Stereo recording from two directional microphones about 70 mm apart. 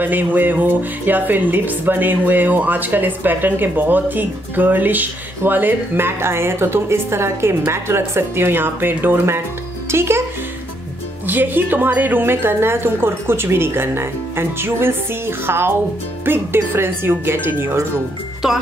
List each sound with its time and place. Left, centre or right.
0.0 s a child's voice: right
11.2 s a woman's voice: right
18.4 s speech: centre